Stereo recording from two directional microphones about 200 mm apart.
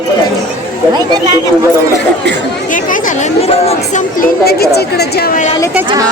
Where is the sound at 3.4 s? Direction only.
30° left (ahead or behind).